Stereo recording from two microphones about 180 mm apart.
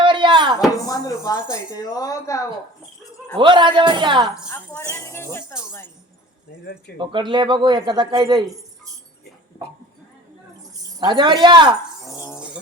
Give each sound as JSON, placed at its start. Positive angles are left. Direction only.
{"t": 0.0, "sound": "a sound", "side_deg": -25}
{"t": 0.9, "sound": "speech", "side_deg": 20}
{"t": 3.3, "sound": "speech", "side_deg": -25}
{"t": 4.4, "sound": "speech", "side_deg": 15}
{"t": 7.0, "sound": "speech", "side_deg": -25}
{"t": 11.0, "sound": "speech", "side_deg": -25}
{"t": 12.0, "sound": "speech", "side_deg": 20}